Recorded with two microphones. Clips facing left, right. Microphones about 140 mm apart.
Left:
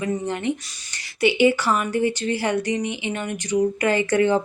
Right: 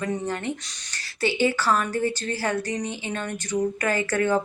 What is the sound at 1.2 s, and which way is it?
Speech, 15° left (ahead or behind).